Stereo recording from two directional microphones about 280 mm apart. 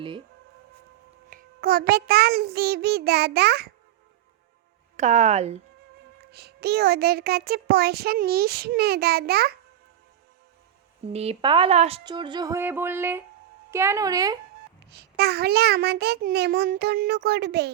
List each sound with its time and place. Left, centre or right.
1.3 s a child's voice: right
4.9 s speech: right
6.1 s a child's voice: right
11.0 s speech: right
14.8 s a child's voice: right